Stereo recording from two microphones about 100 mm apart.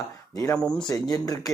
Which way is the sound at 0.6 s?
10° left (ahead or behind).